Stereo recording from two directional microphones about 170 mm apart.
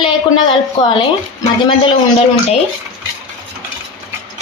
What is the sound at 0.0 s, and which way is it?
A woman's voice, 30° left (ahead or behind).